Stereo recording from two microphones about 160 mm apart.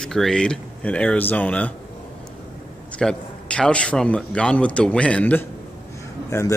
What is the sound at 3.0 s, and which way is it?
A man's voice, 5° left (ahead or behind).